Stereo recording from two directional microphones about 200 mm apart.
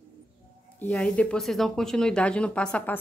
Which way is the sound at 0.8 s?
5° left (ahead or behind).